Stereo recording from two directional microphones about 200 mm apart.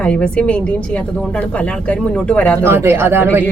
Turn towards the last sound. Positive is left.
turn(degrees=-10)  # may be behind; listen again after turning